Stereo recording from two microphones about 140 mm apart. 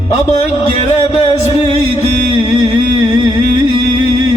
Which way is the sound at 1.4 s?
45° left (ahead or behind).